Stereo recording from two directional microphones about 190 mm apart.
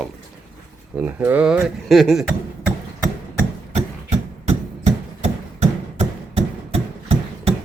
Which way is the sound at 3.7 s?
35° right (ahead or behind).